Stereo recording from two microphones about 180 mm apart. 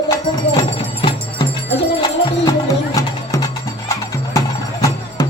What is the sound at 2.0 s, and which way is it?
Music, 20° left (ahead or behind).